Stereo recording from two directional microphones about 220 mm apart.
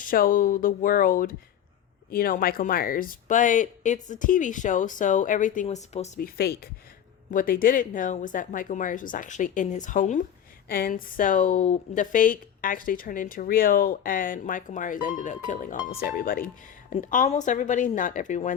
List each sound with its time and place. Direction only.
0.0 s speech: 40° left (ahead or behind)